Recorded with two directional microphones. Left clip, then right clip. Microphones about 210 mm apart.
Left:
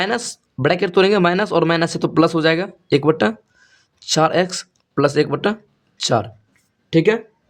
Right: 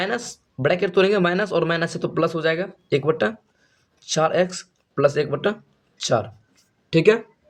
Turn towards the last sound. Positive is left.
turn(degrees=15)  # may be behind; listen again after turning